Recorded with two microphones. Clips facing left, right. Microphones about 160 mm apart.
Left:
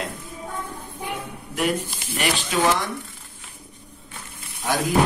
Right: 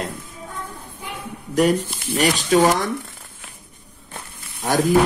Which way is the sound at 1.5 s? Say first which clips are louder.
Right 7 dB; 40° right (ahead or behind).